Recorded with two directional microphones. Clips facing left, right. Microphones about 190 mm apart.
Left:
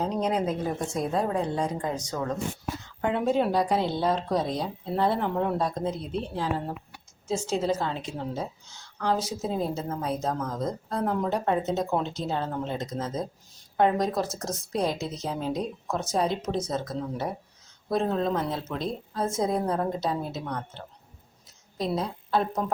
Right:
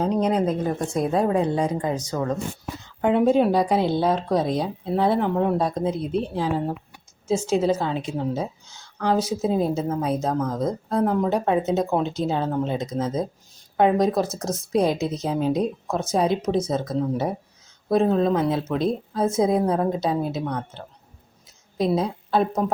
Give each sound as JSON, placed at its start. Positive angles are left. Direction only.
{"t": 0.0, "sound": "speech", "side_deg": 0}
{"t": 1.0, "sound": "speech", "side_deg": -10}
{"t": 3.0, "sound": "speech", "side_deg": -15}
{"t": 21.8, "sound": "a woman's voice", "side_deg": -15}